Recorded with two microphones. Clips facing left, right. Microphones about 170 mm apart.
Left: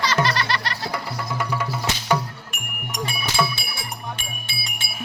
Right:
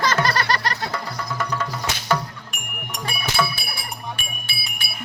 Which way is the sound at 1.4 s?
10° left (ahead or behind).